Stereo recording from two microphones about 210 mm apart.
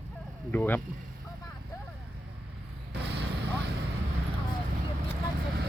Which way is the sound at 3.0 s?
55° right (ahead or behind).